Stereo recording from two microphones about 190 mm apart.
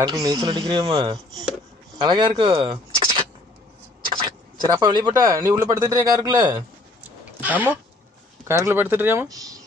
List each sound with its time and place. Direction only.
0.0 s speech: 20° right (ahead or behind)
7.0 s a sound: 10° right (ahead or behind)
8.5 s speech: 15° right (ahead or behind)